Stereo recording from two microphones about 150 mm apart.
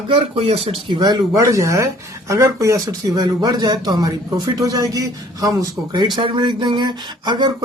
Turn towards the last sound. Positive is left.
turn(degrees=-30)  # may be behind; listen again after turning